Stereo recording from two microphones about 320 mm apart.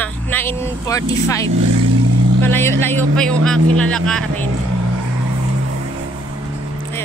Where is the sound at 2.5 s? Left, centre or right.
Centre.